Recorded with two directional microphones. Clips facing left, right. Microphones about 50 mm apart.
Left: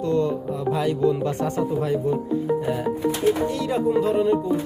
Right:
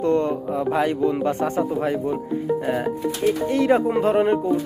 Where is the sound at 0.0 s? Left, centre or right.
Right.